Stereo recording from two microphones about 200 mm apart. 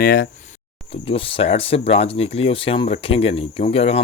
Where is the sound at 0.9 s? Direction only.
25° left (ahead or behind).